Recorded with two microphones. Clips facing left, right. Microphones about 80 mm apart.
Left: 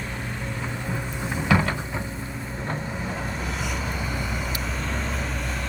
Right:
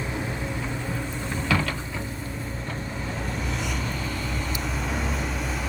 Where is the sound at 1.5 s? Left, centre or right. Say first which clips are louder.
Left 4 dB; left.